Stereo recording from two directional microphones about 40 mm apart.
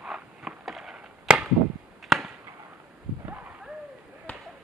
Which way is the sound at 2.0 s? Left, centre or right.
Centre.